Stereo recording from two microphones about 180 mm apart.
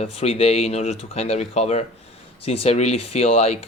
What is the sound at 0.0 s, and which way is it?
Speech, 35° left (ahead or behind).